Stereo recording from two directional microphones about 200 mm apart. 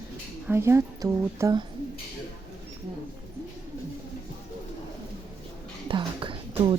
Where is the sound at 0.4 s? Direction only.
10° right (ahead or behind).